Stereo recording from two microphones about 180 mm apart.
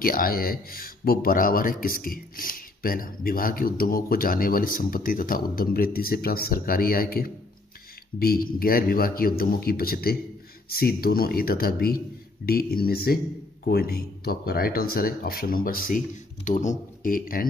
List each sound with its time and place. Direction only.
0.0 s speech: 55° left (ahead or behind)